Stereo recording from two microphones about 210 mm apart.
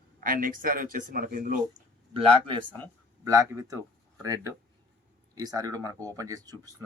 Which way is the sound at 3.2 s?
15° right (ahead or behind).